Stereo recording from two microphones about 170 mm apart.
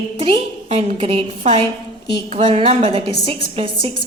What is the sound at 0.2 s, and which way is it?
A woman's voice, 35° right (ahead or behind).